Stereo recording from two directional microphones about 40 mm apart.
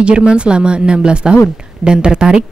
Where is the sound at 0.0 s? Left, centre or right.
Right.